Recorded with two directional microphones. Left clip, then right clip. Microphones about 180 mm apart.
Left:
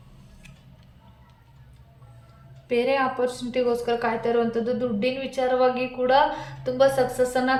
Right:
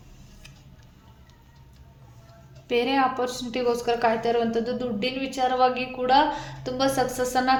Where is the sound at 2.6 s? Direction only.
35° right (ahead or behind).